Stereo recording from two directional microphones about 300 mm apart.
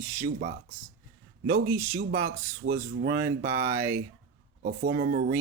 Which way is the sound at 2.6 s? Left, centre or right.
Right.